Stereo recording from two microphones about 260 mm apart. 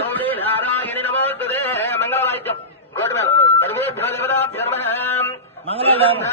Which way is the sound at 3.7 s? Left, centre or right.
Centre.